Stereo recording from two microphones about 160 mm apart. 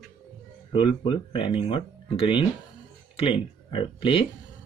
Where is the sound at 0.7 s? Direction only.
30° left (ahead or behind).